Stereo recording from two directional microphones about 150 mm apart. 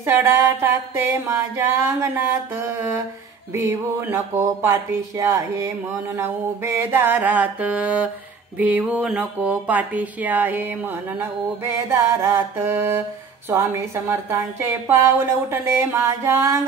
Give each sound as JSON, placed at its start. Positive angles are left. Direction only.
{"t": 0.0, "sound": "speech", "side_deg": -15}